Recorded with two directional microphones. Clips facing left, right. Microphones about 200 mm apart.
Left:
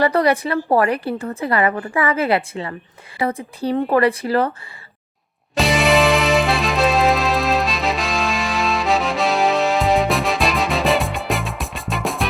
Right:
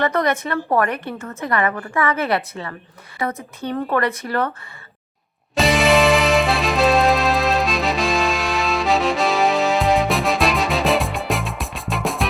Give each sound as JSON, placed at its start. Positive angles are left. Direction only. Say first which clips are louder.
{"t": 0.0, "sound": "a woman's voice", "louder": "left 3 dB", "side_deg": 35}
{"t": 5.5, "sound": "music", "louder": "even", "side_deg": 0}